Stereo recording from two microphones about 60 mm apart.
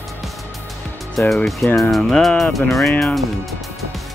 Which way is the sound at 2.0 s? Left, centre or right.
Centre.